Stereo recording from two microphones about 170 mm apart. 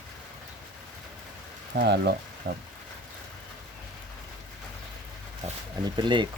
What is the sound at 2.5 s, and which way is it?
Speech, 90° right.